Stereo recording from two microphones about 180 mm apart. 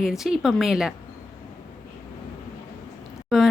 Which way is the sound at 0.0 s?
5° right (ahead or behind).